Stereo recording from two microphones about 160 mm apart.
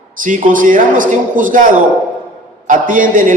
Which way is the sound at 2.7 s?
55° right (ahead or behind).